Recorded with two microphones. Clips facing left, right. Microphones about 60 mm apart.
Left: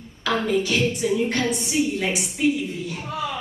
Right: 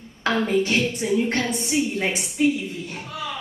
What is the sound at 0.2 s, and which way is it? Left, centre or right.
A woman's voice, right.